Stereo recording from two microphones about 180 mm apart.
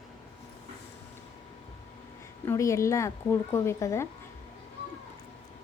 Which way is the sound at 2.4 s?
15° left (ahead or behind).